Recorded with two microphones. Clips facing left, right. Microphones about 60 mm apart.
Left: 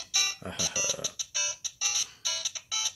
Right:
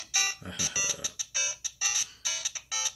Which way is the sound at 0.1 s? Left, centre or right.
Right.